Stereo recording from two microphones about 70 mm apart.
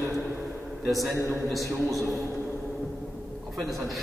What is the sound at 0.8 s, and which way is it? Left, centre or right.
A man's voice, centre.